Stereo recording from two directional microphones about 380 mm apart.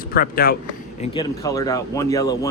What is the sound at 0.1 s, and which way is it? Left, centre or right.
Speech, left.